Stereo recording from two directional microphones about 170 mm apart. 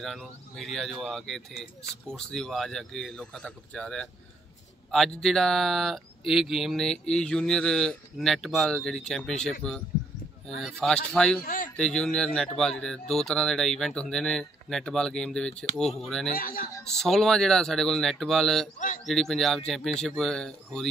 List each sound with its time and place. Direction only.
0.0 s speech: centre (ahead or behind)
11.4 s speech: 55° left (ahead or behind)
11.7 s speech: 5° left (ahead or behind)
16.3 s a man's voice: 60° left (ahead or behind)
16.8 s speech: 5° left (ahead or behind)